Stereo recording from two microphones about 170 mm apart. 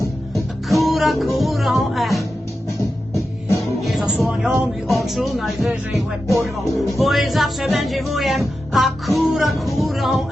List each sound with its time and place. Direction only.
0.3 s speech: centre (ahead or behind)
3.6 s speech: centre (ahead or behind)
6.0 s music: centre (ahead or behind)